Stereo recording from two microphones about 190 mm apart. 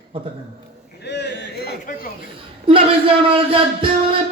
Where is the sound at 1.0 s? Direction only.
65° left (ahead or behind).